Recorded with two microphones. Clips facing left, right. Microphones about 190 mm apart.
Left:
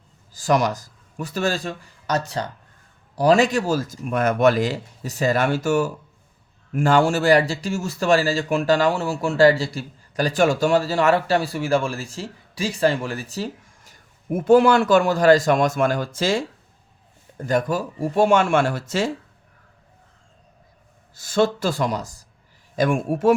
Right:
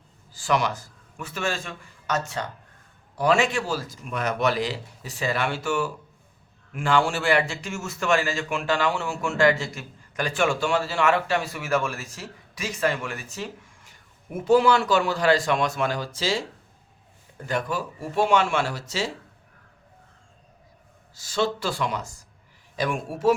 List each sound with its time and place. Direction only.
0.3 s speech: 40° left (ahead or behind)
21.2 s speech: 50° left (ahead or behind)
22.7 s speech: 45° left (ahead or behind)